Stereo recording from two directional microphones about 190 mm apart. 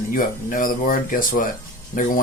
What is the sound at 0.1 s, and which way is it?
Speech, 45° left (ahead or behind).